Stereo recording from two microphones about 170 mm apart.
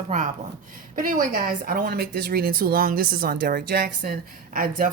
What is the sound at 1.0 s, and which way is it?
A woman's voice, 55° right (ahead or behind).